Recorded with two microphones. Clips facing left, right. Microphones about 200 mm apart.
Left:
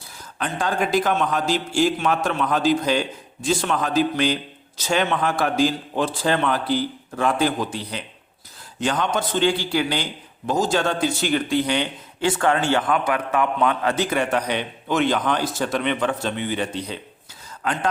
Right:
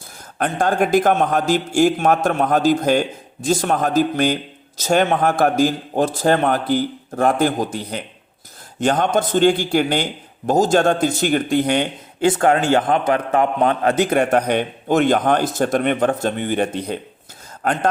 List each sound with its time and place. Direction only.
0.3 s a man's voice: 50° right (ahead or behind)